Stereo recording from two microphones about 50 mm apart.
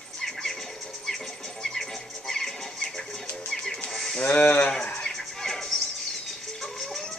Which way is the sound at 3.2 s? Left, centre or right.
Left.